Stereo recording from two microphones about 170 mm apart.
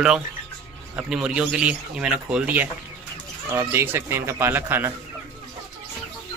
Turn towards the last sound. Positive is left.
turn(degrees=-15)  # may be behind; listen again after turning